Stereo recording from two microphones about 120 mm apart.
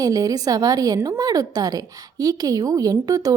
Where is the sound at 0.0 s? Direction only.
30° right (ahead or behind).